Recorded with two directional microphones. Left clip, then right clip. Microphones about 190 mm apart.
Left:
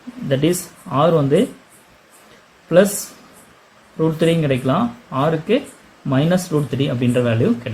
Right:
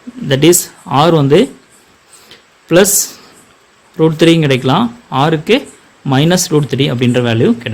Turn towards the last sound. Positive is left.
turn(degrees=-50)  # may be behind; listen again after turning